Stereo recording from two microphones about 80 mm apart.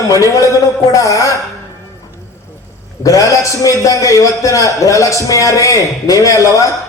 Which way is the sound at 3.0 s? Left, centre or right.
Left.